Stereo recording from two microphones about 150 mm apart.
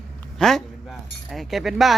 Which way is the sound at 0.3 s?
5° left (ahead or behind).